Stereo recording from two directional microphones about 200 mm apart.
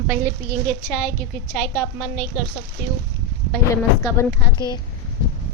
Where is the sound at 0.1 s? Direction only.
10° right (ahead or behind).